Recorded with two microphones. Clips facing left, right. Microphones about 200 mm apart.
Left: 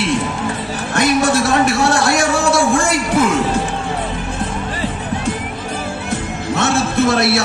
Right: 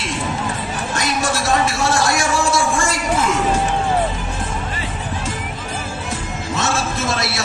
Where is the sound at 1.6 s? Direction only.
60° left (ahead or behind).